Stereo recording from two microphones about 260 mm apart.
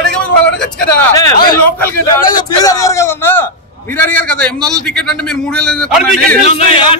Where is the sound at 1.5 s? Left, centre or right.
Centre.